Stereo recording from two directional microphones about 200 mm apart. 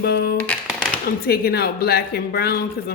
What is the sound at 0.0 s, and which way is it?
Speech, 50° left (ahead or behind).